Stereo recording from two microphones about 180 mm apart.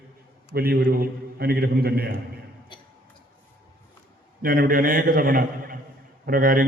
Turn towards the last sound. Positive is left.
turn(degrees=-50)  # may be behind; listen again after turning